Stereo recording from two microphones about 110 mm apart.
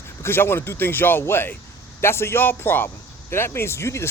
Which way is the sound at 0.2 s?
20° left (ahead or behind).